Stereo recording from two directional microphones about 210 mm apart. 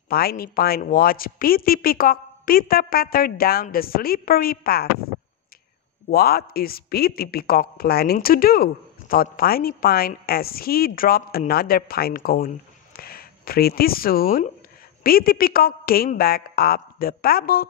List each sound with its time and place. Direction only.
0.1 s a woman's voice: 45° left (ahead or behind)
6.0 s a woman's voice: 45° left (ahead or behind)